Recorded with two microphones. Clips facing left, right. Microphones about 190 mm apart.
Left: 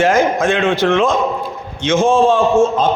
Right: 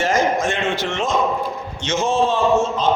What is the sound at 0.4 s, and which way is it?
Speech, 90° left.